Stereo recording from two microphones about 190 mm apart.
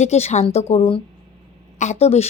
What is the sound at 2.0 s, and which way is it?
Speech, 35° left (ahead or behind).